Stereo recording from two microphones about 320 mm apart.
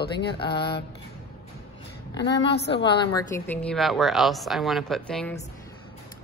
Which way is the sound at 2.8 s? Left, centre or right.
Centre.